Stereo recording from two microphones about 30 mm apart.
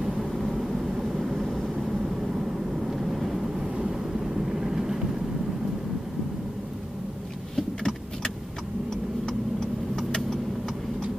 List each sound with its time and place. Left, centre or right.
0.0 s vehicle: centre
3.6 s vehicle: right
7.5 s vehicle: centre